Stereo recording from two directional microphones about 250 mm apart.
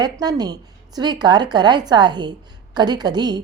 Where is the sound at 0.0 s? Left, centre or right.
Centre.